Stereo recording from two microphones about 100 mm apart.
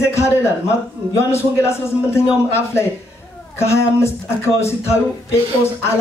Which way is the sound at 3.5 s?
25° left (ahead or behind).